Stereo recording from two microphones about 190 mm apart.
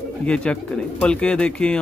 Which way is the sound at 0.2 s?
5° left (ahead or behind).